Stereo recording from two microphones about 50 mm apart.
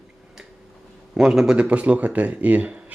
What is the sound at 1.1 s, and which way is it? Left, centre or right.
Speech, centre.